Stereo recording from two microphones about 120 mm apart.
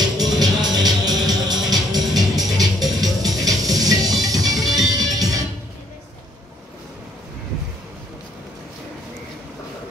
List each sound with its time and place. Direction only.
0.0 s music: 35° right (ahead or behind)